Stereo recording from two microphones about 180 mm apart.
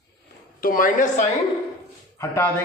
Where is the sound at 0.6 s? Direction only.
50° left (ahead or behind).